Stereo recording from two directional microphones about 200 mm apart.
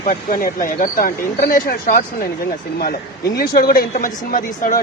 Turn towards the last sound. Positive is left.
turn(degrees=45)  # may be behind; listen again after turning